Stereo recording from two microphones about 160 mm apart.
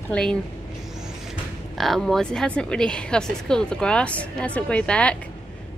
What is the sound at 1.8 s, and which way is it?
Speech, centre (ahead or behind).